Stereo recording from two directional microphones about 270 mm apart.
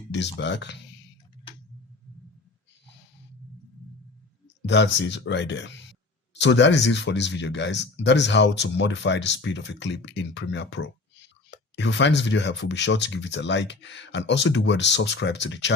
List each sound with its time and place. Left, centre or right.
0.1 s speech: left
4.6 s speech: left